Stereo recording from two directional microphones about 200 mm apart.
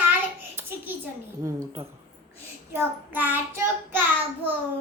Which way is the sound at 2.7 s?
10° right (ahead or behind).